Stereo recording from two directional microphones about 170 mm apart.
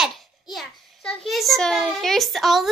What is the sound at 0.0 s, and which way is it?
A child's voice, centre (ahead or behind).